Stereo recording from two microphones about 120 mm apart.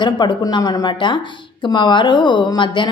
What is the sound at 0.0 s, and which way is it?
A woman's voice, 40° left (ahead or behind).